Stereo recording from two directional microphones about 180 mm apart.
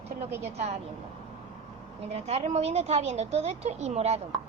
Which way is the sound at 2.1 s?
35° right (ahead or behind).